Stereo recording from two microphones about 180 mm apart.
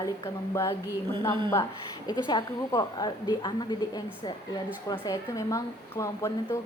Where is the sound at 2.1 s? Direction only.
25° left (ahead or behind).